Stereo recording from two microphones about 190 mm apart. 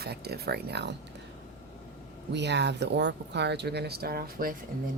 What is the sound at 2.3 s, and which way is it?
Speech, 65° right (ahead or behind).